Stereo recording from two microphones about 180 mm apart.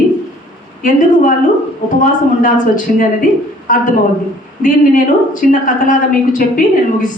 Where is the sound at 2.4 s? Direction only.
45° left (ahead or behind).